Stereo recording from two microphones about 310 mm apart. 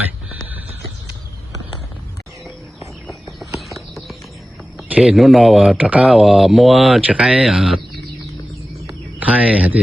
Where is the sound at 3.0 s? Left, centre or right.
Centre.